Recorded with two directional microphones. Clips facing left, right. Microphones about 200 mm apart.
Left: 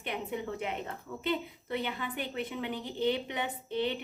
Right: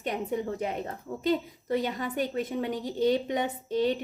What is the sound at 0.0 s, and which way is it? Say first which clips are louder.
A woman's voice: right 5 dB; 40° right (ahead or behind).